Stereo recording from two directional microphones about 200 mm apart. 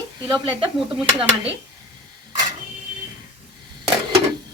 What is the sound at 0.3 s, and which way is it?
Speech, 20° right (ahead or behind).